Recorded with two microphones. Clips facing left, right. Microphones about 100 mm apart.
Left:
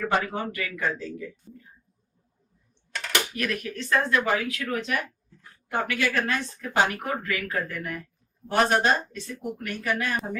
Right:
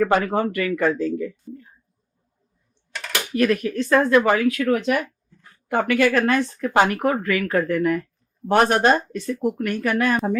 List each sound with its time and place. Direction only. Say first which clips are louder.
0.0 s speech: right 7 dB; 55° right (ahead or behind)
2.9 s typing: even; centre (ahead or behind)
3.3 s speech: right 10 dB; 35° right (ahead or behind)
5.7 s speech: right 8 dB; 60° right (ahead or behind)